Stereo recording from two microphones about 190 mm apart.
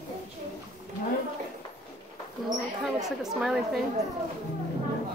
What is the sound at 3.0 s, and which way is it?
Speech, centre (ahead or behind).